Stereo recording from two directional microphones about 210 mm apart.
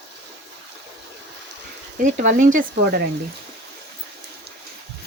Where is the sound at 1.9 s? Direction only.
40° right (ahead or behind).